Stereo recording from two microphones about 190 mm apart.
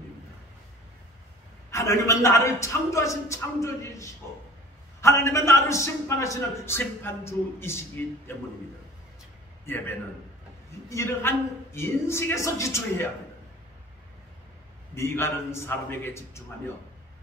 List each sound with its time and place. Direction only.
1.7 s a man's voice: 15° left (ahead or behind)
9.7 s a man's voice: 10° left (ahead or behind)
15.0 s a man's voice: 15° left (ahead or behind)